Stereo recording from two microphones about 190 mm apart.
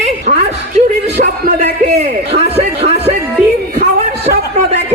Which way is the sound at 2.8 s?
35° right (ahead or behind).